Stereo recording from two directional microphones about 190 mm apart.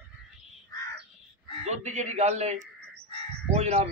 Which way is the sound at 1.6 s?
35° right (ahead or behind).